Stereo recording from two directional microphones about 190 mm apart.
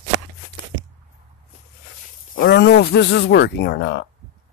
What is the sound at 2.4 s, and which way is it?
Speech, 60° left (ahead or behind).